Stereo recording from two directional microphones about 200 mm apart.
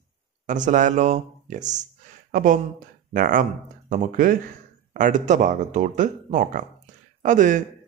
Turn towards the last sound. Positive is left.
turn(degrees=-40)  # may be behind; listen again after turning